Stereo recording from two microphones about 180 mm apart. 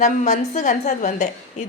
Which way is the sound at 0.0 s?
45° left (ahead or behind).